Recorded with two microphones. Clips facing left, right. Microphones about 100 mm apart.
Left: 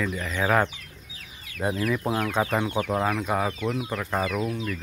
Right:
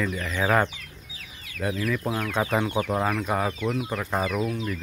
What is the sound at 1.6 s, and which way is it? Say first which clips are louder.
Speech: left 1 dB; 30° left (ahead or behind).